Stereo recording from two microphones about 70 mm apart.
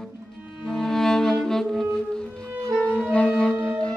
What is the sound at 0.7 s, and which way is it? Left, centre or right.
Music, centre.